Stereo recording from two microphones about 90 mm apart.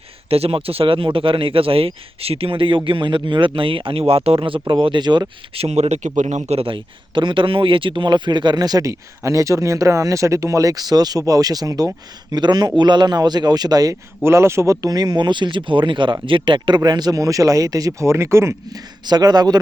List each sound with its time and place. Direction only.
0.3 s a man's voice: 90° right
4.8 s speech: 60° right (ahead or behind)
5.5 s speech: 90° right
6.6 s speech: 70° right (ahead or behind); by 13.9 s 45° right (ahead or behind)
14.3 s speech: 30° right (ahead or behind)
18.7 s speech: 45° right (ahead or behind)